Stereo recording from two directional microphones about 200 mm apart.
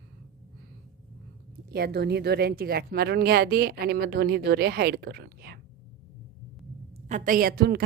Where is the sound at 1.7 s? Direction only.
50° right (ahead or behind).